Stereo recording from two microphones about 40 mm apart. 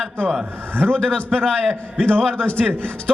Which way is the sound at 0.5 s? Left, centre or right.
Right.